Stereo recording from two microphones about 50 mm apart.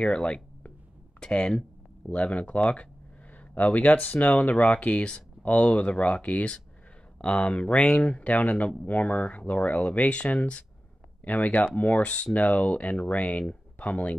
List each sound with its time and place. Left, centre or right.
0.0 s speech: left